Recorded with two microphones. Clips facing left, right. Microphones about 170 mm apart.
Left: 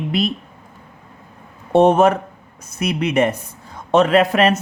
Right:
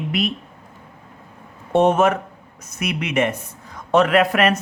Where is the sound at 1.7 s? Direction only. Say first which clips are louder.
Left 3 dB; 35° left (ahead or behind).